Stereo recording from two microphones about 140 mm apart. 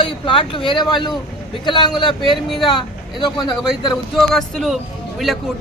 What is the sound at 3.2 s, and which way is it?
Speech, 30° left (ahead or behind).